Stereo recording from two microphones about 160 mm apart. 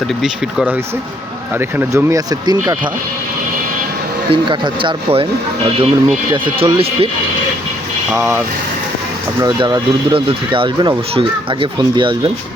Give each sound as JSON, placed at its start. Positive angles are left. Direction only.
{"t": 1.5, "sound": "speech", "side_deg": -15}
{"t": 4.3, "sound": "speech", "side_deg": -30}
{"t": 8.1, "sound": "speech", "side_deg": -15}
{"t": 9.4, "sound": "speech", "side_deg": -25}